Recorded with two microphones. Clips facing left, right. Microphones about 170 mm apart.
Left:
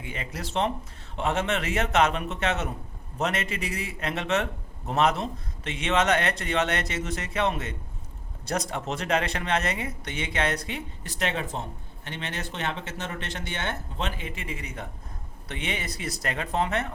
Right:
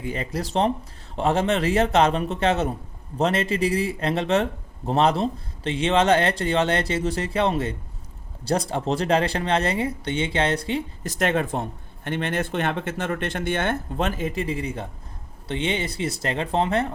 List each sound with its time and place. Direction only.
0.0 s speech: 35° right (ahead or behind)
11.0 s speech: 45° right (ahead or behind); by 16.9 s 30° right (ahead or behind)